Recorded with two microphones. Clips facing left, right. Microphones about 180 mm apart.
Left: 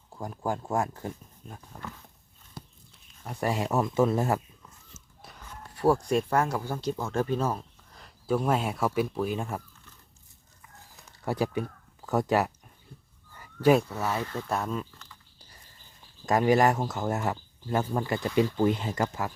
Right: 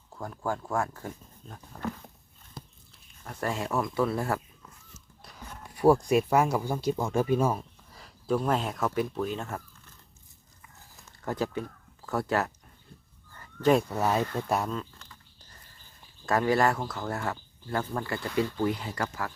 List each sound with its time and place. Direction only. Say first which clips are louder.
0.1 s speech: left 1 dB; 15° left (ahead or behind)
1.5 s speech: left 2 dB; 10° left (ahead or behind)
3.2 s speech: left 3 dB; 15° left (ahead or behind)
5.6 s a sound: right 3 dB; 10° right (ahead or behind)
6.1 s speech: right 2 dB; 10° right (ahead or behind); by 9.6 s 10° left (ahead or behind)
10.9 s a sound: left 2 dB; 10° left (ahead or behind)
12.0 s speech: left 3 dB; 15° left (ahead or behind)
13.3 s a sound: left 2 dB; 10° left (ahead or behind)
14.0 s speech: right 4 dB; 20° right (ahead or behind)
16.2 s speech: left 2 dB; 15° left (ahead or behind)